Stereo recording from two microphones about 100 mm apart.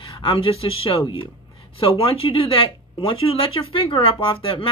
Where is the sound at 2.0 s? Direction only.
65° left (ahead or behind).